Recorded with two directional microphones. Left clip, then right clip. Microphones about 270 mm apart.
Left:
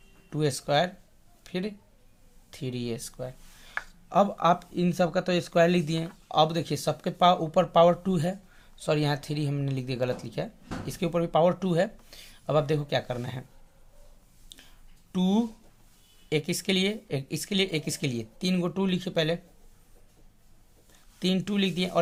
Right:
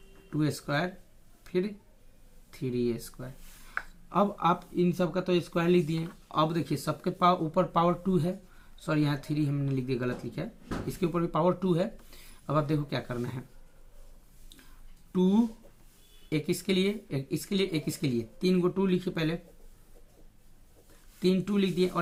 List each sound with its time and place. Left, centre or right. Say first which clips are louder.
0.3 s speech: left 5 dB; left
15.1 s speech: right 1 dB; left
21.2 s speech: even; left